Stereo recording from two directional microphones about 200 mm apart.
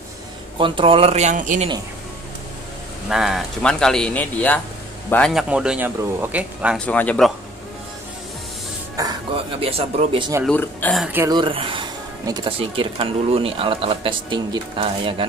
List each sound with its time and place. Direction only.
0.6 s speech: 25° right (ahead or behind)
3.1 s speech: centre (ahead or behind)
6.9 s speech: 5° left (ahead or behind)
9.0 s music: 15° right (ahead or behind)
9.6 s speech: 30° right (ahead or behind)
10.4 s speech: 10° left (ahead or behind)
11.1 s speech: 10° right (ahead or behind)
11.3 s speech: 25° right (ahead or behind)